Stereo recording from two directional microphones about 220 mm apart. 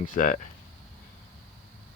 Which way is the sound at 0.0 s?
35° left (ahead or behind).